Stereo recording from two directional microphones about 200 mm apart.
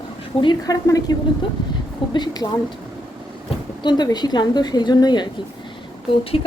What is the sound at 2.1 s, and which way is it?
Speech, 20° left (ahead or behind).